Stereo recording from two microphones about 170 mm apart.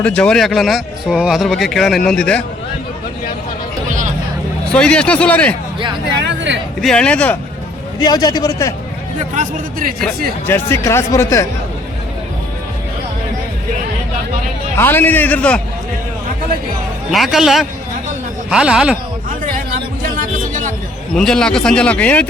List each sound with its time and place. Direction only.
0.0 s speech: 5° left (ahead or behind)
4.7 s speech: 5° left (ahead or behind)
6.1 s speech: 90° right
6.8 s speech: 5° left (ahead or behind)
7.9 s a man's voice: 25° left (ahead or behind)
9.3 s speech: 45° right (ahead or behind)
10.4 s speech: 15° left (ahead or behind)
14.8 s speech: 10° left (ahead or behind)
17.1 s speech: centre (ahead or behind)
19.5 s music: 55° right (ahead or behind)
21.2 s speech: 5° left (ahead or behind)